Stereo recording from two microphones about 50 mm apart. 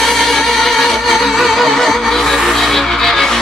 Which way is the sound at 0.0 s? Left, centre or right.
Centre.